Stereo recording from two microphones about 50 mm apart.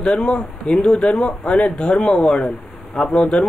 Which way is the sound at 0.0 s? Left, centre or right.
Centre.